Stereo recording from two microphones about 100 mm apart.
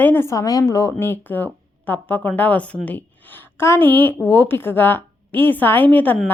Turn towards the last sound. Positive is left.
turn(degrees=15)  # may be behind; listen again after turning